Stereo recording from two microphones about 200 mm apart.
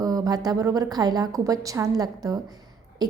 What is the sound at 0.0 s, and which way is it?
A woman's voice, 20° right (ahead or behind).